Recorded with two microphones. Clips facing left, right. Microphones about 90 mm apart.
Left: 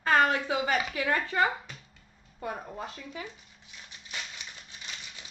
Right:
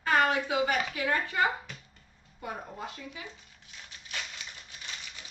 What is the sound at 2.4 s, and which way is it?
Speech, 35° left (ahead or behind).